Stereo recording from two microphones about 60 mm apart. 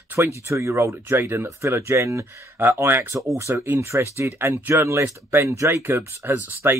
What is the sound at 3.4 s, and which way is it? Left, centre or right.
Speech, right.